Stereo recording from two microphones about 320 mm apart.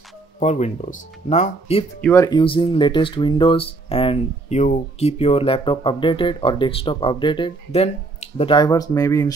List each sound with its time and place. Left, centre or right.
0.4 s speech: left
2.0 s speech: centre